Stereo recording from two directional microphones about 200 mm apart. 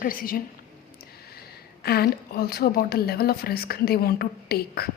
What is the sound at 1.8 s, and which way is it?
A woman's voice, 50° left (ahead or behind).